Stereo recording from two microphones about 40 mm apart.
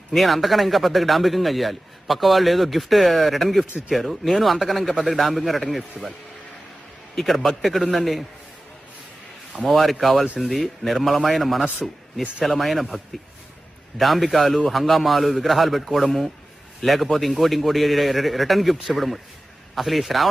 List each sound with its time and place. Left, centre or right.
0.1 s a man's voice: centre
7.2 s a man's voice: centre
9.5 s a man's voice: centre
14.0 s a man's voice: centre